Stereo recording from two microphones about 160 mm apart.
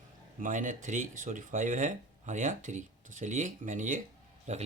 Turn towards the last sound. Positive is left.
turn(degrees=-45)  # may be behind; listen again after turning